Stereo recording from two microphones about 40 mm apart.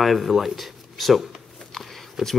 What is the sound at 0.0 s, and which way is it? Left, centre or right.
Speech, centre.